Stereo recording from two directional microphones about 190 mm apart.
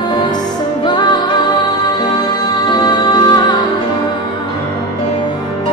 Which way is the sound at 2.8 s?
20° left (ahead or behind).